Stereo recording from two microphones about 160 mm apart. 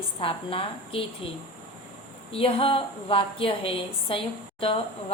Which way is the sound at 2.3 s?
35° left (ahead or behind).